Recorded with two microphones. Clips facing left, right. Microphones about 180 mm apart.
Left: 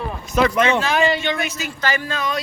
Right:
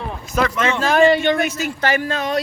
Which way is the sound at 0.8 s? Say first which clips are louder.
Right 5 dB; 50° right (ahead or behind).